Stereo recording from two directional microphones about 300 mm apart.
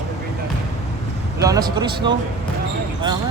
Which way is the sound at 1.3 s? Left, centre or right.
Centre.